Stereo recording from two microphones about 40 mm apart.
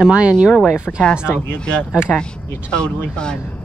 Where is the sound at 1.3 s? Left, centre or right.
Left.